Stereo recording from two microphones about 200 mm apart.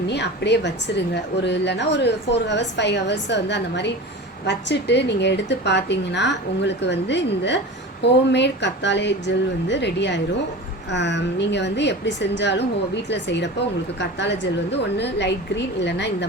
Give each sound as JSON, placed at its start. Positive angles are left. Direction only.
{"t": 0.1, "sound": "a woman's voice", "side_deg": 60}